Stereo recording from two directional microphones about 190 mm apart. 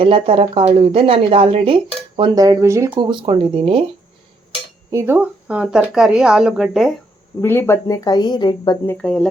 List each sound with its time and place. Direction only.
0.0 s speech: 30° right (ahead or behind)
4.9 s speech: 10° right (ahead or behind)
7.4 s speech: 10° left (ahead or behind)
8.9 s speech: 5° left (ahead or behind)